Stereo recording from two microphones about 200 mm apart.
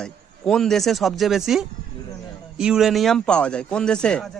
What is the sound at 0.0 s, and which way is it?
Speech, 5° left (ahead or behind).